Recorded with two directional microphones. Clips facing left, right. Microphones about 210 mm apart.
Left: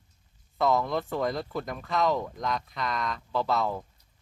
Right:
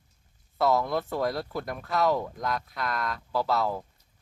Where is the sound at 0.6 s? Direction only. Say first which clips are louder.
Right 1 dB; 5° right (ahead or behind).